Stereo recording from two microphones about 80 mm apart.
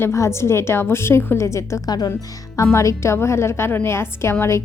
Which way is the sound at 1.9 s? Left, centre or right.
Left.